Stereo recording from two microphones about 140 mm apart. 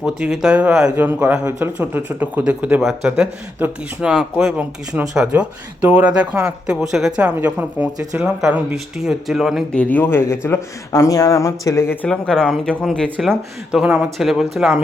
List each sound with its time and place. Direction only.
0.0 s speech: 5° right (ahead or behind)
9.7 s speech: 10° left (ahead or behind)
12.0 s speech: 5° left (ahead or behind)
13.7 s speech: 5° right (ahead or behind)